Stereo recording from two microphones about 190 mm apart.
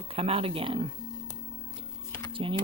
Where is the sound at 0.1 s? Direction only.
30° right (ahead or behind).